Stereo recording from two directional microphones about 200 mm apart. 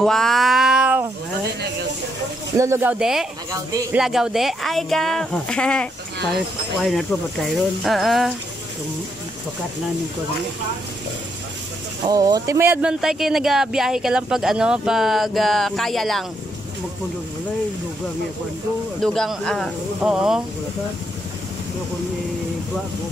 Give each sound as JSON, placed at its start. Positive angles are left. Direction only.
{"t": 0.0, "sound": "a sound", "side_deg": 0}
{"t": 2.5, "sound": "speech", "side_deg": -15}
{"t": 3.5, "sound": "speech", "side_deg": -15}
{"t": 4.0, "sound": "speech", "side_deg": 0}
{"t": 12.1, "sound": "speech", "side_deg": -20}
{"t": 19.0, "sound": "speech", "side_deg": 0}